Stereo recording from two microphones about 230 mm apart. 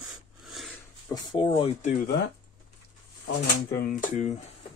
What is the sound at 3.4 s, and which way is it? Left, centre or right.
Speech, left.